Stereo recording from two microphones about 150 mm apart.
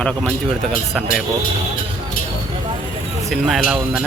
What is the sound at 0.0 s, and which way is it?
A man's voice, 5° left (ahead or behind).